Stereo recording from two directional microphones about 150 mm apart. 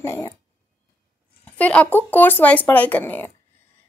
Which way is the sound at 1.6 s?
10° left (ahead or behind).